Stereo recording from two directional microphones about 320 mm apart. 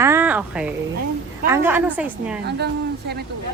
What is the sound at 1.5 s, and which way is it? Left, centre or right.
Speech, centre.